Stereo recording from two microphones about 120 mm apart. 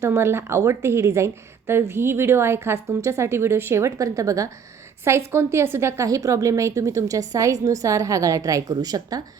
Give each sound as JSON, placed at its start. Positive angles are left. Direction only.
{"t": 0.0, "sound": "a woman's voice", "side_deg": -20}